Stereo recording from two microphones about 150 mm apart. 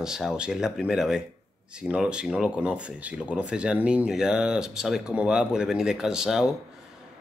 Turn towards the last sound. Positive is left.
turn(degrees=-5)  # may be behind; listen again after turning